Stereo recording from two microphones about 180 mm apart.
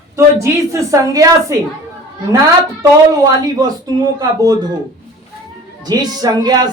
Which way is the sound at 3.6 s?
20° right (ahead or behind).